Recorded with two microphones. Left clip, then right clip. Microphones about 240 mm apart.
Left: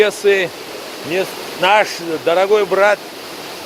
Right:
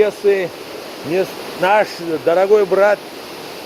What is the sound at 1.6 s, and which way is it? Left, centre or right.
Speech, centre.